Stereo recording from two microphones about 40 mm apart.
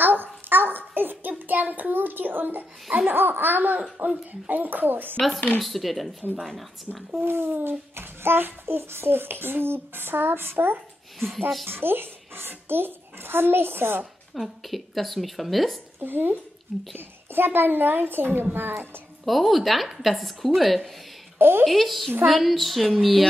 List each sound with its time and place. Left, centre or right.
0.0 s a sound: right
1.5 s a child's voice: right
5.6 s a woman's voice: centre
7.2 s a child's voice: right
11.1 s speech: centre
11.6 s a child's voice: right
14.3 s a woman's voice: centre
16.0 s a child's voice: right
19.2 s a woman's voice: centre
21.4 s speech: right
21.6 s a woman's voice: centre